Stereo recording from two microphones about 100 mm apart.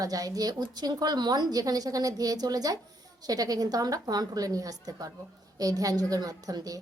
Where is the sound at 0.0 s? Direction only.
35° right (ahead or behind).